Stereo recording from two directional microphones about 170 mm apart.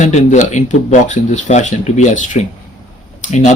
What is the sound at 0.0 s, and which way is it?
Speech, 45° left (ahead or behind).